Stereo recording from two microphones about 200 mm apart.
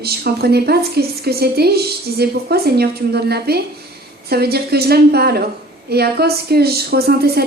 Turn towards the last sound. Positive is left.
turn(degrees=-50)  # may be behind; listen again after turning